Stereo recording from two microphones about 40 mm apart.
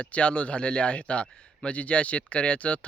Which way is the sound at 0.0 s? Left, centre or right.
Left.